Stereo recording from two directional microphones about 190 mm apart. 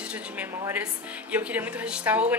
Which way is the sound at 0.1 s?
10° right (ahead or behind).